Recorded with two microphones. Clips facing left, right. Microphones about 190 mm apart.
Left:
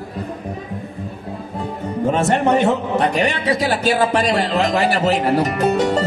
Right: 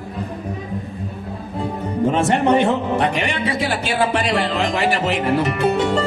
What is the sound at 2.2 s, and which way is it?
A man's voice, 40° left (ahead or behind).